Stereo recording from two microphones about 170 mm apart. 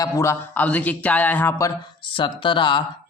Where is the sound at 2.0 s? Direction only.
30° left (ahead or behind).